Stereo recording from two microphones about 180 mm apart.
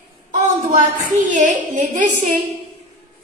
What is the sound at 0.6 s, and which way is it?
A woman's voice, 40° right (ahead or behind).